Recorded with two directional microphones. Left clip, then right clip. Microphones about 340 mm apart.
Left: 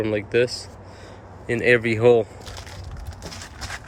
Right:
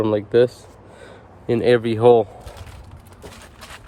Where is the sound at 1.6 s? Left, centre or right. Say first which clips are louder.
Right 1 dB; right.